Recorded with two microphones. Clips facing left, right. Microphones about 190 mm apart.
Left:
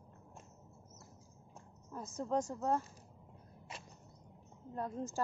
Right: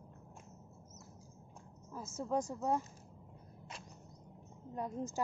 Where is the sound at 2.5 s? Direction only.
15° right (ahead or behind).